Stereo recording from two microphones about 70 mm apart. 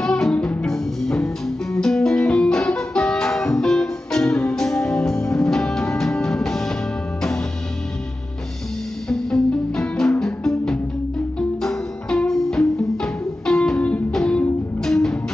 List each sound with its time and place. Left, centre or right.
0.0 s music: centre
0.3 s music: centre
0.7 s music: centre
9.1 s music: centre
13.7 s music: centre
14.1 s music: centre